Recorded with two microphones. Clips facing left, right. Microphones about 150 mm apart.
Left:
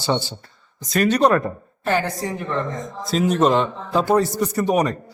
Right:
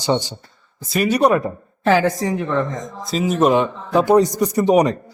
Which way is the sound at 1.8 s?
90° right.